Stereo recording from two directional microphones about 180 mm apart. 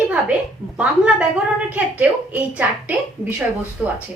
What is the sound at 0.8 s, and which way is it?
A woman's voice, 5° right (ahead or behind).